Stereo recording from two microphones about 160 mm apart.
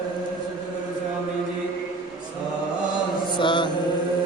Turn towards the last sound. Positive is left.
turn(degrees=30)  # may be behind; listen again after turning